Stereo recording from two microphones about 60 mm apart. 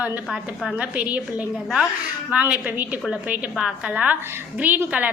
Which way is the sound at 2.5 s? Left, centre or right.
Right.